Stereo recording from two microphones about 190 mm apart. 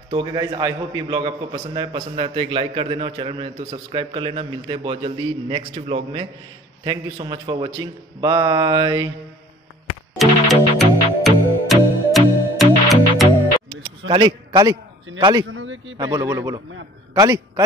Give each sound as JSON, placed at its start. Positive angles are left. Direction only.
{"t": 0.1, "sound": "a man's voice", "side_deg": -25}
{"t": 10.1, "sound": "music", "side_deg": 0}
{"t": 13.7, "sound": "a sound", "side_deg": -25}
{"t": 15.1, "sound": "a man's voice", "side_deg": -25}
{"t": 15.4, "sound": "a man's voice", "side_deg": -85}
{"t": 16.0, "sound": "a man's voice", "side_deg": -20}